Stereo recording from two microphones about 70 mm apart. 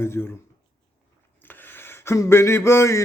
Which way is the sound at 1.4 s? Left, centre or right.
Left.